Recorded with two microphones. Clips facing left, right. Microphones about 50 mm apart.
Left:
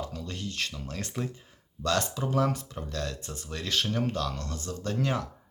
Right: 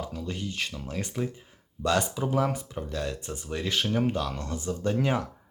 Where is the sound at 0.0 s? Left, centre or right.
Centre.